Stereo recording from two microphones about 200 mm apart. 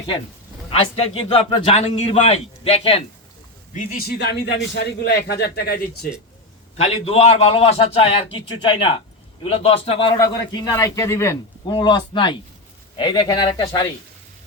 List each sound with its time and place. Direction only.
0.7 s a man's voice: 30° left (ahead or behind)
3.8 s a man's voice: 50° left (ahead or behind)
6.7 s a man's voice: 30° left (ahead or behind)
10.2 s a man's voice: 15° left (ahead or behind)